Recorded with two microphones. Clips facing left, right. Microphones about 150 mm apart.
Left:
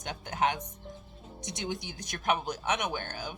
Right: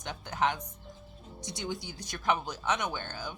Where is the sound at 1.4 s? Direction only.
20° left (ahead or behind).